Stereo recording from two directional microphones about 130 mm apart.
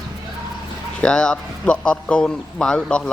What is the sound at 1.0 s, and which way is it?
A man's voice, 5° left (ahead or behind).